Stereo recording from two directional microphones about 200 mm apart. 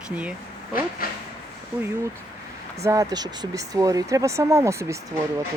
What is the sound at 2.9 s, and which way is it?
Speech, 15° right (ahead or behind).